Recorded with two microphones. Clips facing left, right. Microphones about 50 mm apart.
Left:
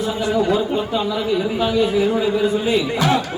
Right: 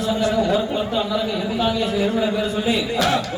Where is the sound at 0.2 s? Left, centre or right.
Left.